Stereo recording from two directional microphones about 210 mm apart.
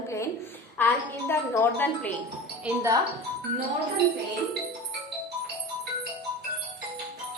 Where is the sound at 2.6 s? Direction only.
10° right (ahead or behind).